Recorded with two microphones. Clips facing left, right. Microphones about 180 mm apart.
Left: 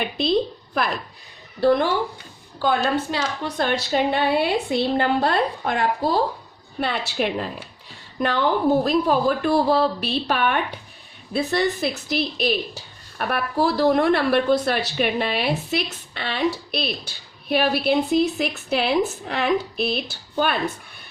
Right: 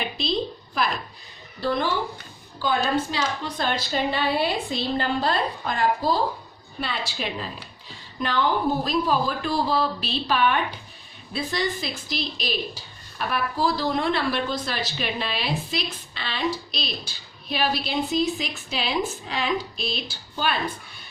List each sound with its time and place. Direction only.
0.2 s a woman's voice: 55° left (ahead or behind)